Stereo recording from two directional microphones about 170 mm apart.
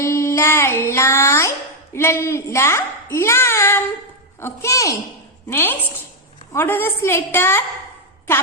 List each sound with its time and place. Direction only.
0.0 s child singing: 15° left (ahead or behind)
4.4 s a woman's voice: 15° left (ahead or behind)